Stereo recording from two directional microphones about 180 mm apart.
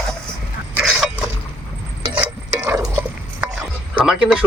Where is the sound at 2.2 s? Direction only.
10° right (ahead or behind).